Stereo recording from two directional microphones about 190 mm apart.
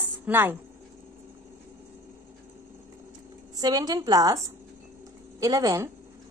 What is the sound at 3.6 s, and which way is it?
A woman's voice, 20° right (ahead or behind).